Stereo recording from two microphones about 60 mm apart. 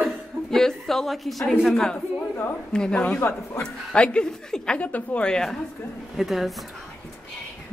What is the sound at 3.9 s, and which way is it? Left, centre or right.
A woman's voice, centre.